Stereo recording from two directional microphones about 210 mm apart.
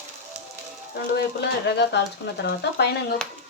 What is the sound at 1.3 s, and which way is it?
Speech, 50° left (ahead or behind).